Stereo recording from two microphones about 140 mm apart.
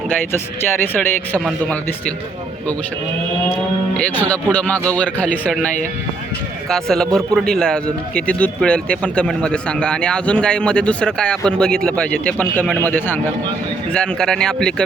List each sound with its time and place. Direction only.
0.3 s a man's voice: 15° left (ahead or behind)
3.9 s a man's voice: 10° left (ahead or behind)
6.7 s a man's voice: 5° left (ahead or behind)